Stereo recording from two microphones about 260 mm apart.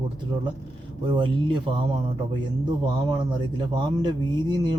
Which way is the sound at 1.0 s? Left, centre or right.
Centre.